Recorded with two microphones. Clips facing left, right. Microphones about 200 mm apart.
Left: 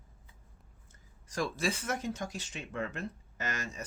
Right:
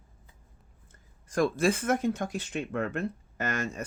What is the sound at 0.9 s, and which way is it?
A woman's voice, 55° right (ahead or behind).